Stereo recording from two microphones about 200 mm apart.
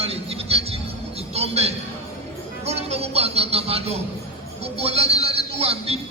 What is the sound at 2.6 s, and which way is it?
Music, 30° right (ahead or behind).